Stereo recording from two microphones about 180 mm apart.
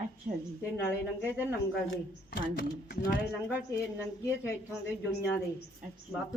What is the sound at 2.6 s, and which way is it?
Speech, 50° left (ahead or behind).